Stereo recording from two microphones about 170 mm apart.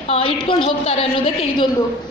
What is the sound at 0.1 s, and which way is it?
A woman's voice, 30° left (ahead or behind).